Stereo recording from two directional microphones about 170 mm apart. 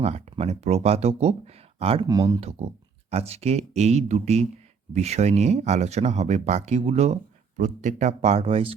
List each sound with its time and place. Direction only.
0.0 s speech: 40° right (ahead or behind)
2.0 s speech: 25° right (ahead or behind)
2.4 s speech: 35° right (ahead or behind)